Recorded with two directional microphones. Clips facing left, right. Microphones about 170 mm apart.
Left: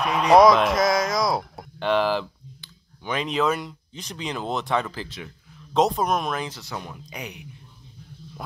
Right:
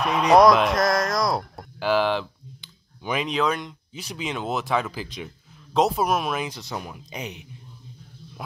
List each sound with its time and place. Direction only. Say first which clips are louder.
0.0 s speech: left 1 dB; centre (ahead or behind)
2.6 s clicking: right 2 dB; 15° right (ahead or behind)
3.2 s speech: left 1 dB; centre (ahead or behind)
3.9 s speech: right 1 dB; 10° right (ahead or behind)
5.0 s speech: right 2 dB; 15° right (ahead or behind)
5.7 s speech: even; centre (ahead or behind); by 7.4 s 20° right (ahead or behind)